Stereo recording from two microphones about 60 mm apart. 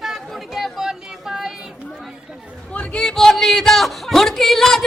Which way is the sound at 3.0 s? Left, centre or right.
Centre.